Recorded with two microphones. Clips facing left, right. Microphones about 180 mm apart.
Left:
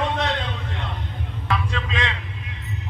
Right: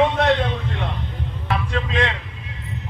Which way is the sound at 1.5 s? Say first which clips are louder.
Right 2 dB; 55° right (ahead or behind).